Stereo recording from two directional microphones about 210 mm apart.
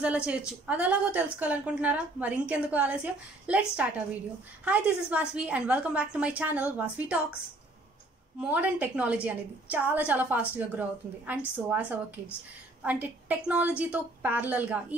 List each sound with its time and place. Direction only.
0.0 s a woman's voice: 5° right (ahead or behind)
8.4 s a woman's voice: 5° right (ahead or behind)